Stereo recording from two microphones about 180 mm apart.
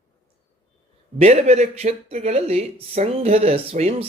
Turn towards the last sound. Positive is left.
turn(degrees=-35)  # may be behind; listen again after turning